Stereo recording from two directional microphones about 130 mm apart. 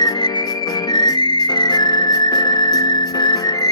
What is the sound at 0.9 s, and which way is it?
Music, 35° left (ahead or behind).